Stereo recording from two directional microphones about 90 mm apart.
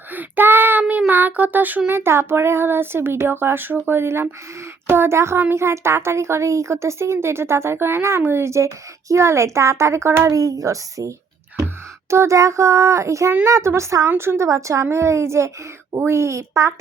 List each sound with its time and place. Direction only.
0.1 s child singing: 20° right (ahead or behind)
1.9 s a woman's voice: 30° right (ahead or behind)
12.1 s a woman's voice: 35° right (ahead or behind)